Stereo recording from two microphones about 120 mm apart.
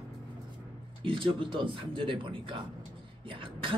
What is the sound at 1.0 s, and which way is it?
A woman's voice, 45° right (ahead or behind).